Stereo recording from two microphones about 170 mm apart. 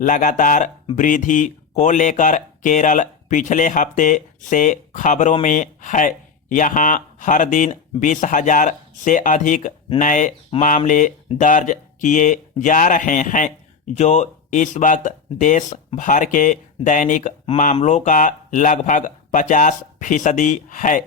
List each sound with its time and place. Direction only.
0.0 s speech: 50° left (ahead or behind)